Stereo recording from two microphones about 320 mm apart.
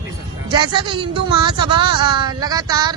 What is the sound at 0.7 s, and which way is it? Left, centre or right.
Speech, centre.